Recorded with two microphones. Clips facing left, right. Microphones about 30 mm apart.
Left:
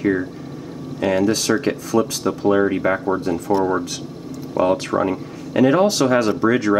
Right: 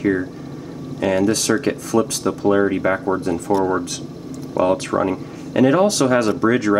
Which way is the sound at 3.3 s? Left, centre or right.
Centre.